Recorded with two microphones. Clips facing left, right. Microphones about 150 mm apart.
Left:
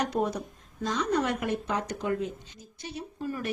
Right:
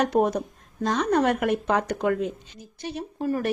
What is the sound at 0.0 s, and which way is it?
A woman's voice, 55° right (ahead or behind).